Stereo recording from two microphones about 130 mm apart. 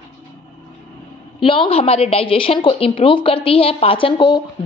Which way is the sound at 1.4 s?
45° left (ahead or behind).